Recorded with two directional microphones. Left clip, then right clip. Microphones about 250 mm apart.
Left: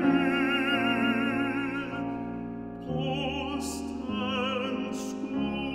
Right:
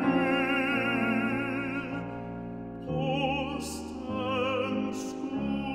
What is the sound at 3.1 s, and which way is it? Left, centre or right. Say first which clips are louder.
Music: right 3 dB; left.